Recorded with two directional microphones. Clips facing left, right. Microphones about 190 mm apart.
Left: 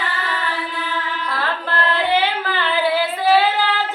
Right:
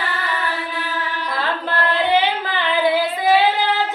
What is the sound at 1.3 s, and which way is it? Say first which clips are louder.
Carnatic music: right 1 dB; 15° right (ahead or behind).